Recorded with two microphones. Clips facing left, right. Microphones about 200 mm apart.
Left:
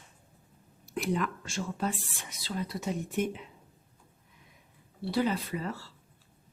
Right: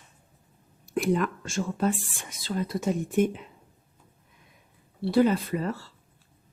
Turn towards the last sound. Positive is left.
turn(degrees=-50)  # may be behind; listen again after turning